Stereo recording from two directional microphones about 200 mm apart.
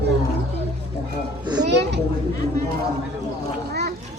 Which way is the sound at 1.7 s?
60° right (ahead or behind).